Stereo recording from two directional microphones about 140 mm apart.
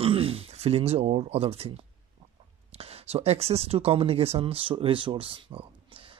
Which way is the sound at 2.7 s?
45° right (ahead or behind).